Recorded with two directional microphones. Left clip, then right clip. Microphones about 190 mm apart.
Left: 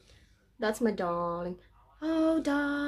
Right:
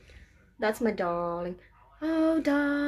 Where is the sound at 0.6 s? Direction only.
5° right (ahead or behind).